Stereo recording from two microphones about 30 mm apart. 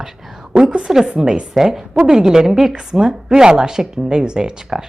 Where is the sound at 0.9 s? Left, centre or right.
Centre.